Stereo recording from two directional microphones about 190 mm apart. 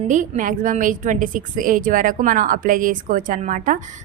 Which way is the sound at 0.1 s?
40° right (ahead or behind).